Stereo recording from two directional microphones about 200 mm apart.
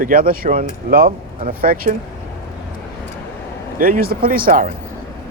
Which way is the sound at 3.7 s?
45° right (ahead or behind).